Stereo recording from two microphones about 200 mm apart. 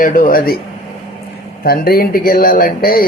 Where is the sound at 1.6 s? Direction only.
50° left (ahead or behind).